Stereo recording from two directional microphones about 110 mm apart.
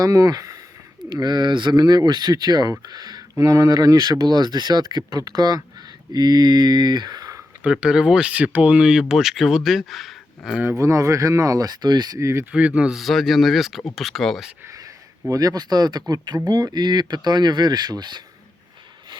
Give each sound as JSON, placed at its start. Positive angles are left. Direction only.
{"t": 0.0, "sound": "speech", "side_deg": -35}
{"t": 7.6, "sound": "speech", "side_deg": -10}
{"t": 10.6, "sound": "speech", "side_deg": -25}
{"t": 12.5, "sound": "speech", "side_deg": -10}
{"t": 15.3, "sound": "speech", "side_deg": -35}